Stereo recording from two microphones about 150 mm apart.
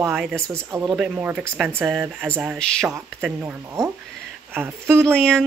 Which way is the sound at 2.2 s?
15° right (ahead or behind).